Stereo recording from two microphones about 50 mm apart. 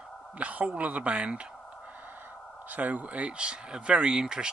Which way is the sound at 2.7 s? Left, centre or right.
Right.